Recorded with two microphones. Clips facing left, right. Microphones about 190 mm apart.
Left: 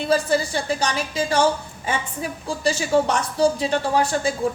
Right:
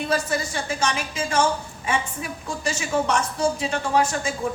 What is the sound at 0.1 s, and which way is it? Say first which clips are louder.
A woman's voice: left 7 dB; 35° left (ahead or behind).